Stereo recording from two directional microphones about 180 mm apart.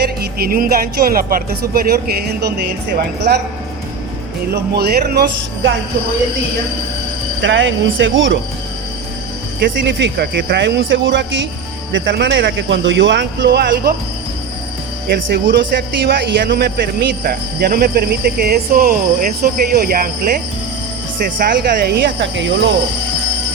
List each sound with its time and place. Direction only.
0.0 s music: 60° right (ahead or behind)
1.1 s a man's voice: 55° right (ahead or behind)
4.5 s a man's voice: 60° right (ahead or behind)
7.4 s speech: 90° right
9.8 s a man's voice: 75° right (ahead or behind)
15.0 s a man's voice: 65° right (ahead or behind)
21.3 s a man's voice: 65° right (ahead or behind); by 22.7 s 85° right